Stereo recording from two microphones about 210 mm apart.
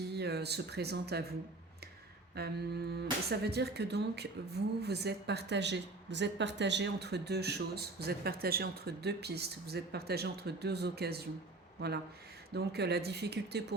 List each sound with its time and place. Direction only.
0.1 s speech: 50° right (ahead or behind)
2.3 s speech: 50° right (ahead or behind)
12.5 s speech: 50° right (ahead or behind)